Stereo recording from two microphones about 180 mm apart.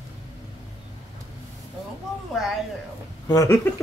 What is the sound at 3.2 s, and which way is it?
Speech, 20° left (ahead or behind).